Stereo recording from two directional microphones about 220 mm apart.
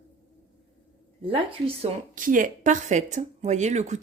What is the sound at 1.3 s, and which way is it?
Speech, 25° right (ahead or behind).